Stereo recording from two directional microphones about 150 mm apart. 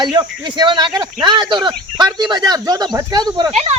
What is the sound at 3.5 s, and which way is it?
Speech, 45° right (ahead or behind).